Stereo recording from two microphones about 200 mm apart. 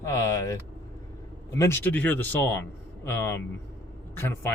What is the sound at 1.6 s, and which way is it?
Speech, 10° left (ahead or behind).